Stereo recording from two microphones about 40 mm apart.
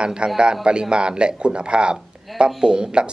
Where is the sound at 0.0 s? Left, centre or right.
Right.